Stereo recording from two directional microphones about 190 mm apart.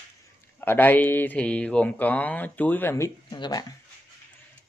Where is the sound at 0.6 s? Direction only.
10° left (ahead or behind).